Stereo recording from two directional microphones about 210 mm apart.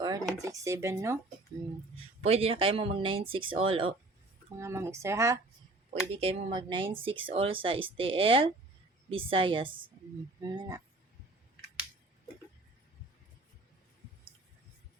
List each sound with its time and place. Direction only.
0.0 s speech: 15° right (ahead or behind)
2.2 s speech: 30° right (ahead or behind)
4.6 s speech: 15° right (ahead or behind)
5.9 s speech: 30° right (ahead or behind)